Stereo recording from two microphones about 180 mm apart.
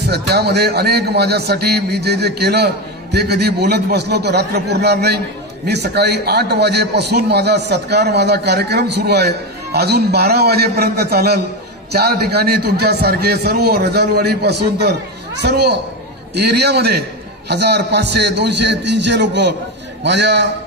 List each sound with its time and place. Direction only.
0.0 s a man's voice: 65° right (ahead or behind)